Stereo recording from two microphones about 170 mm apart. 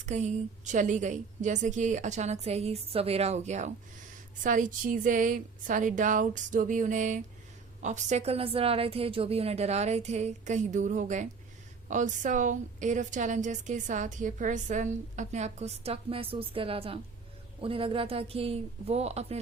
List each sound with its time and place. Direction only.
0.0 s a woman's voice: 45° right (ahead or behind)